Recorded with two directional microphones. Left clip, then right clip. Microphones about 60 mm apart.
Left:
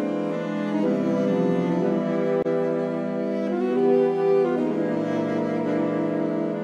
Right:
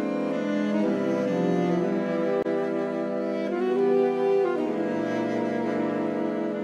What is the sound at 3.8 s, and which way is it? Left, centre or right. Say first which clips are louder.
Music: left 4 dB; right.